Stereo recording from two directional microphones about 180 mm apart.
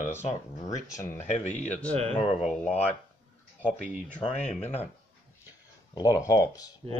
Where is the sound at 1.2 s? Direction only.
40° left (ahead or behind).